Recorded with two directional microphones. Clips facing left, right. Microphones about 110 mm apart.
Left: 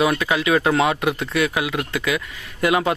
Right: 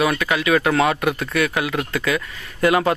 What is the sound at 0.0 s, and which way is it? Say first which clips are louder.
Speech: even; 20° left (ahead or behind).